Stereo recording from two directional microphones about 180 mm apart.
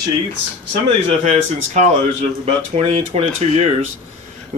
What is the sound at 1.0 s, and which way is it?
Speech, 40° right (ahead or behind).